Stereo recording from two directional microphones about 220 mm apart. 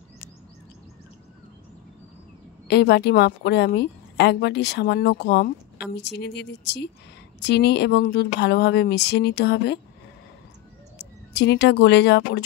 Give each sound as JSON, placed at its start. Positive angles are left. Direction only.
{"t": 2.7, "sound": "a woman's voice", "side_deg": 50}
{"t": 11.0, "sound": "speech", "side_deg": 50}